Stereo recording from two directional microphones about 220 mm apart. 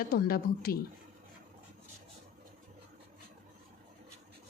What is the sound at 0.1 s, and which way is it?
Speech, 45° left (ahead or behind).